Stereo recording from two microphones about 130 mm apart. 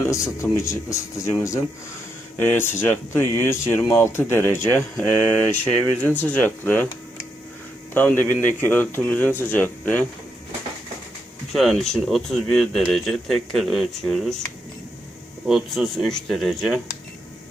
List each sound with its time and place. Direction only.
0.0 s speech: 20° left (ahead or behind)
7.9 s speech: 15° left (ahead or behind)
11.5 s speech: centre (ahead or behind)
15.4 s speech: centre (ahead or behind)